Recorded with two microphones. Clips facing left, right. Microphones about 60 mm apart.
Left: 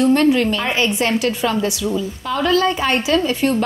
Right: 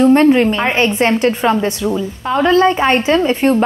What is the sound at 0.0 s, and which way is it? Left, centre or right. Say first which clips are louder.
A woman's voice: right 5 dB; right.